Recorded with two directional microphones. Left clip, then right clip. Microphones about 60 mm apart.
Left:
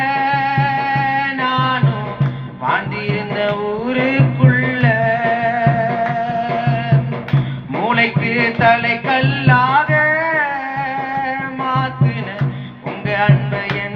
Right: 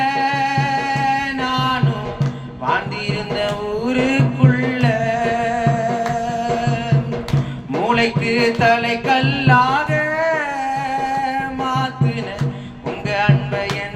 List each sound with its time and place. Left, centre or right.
0.0 s music: centre
7.9 s music: centre